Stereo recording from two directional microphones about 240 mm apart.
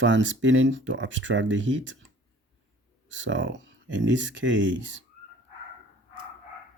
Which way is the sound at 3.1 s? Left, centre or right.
Right.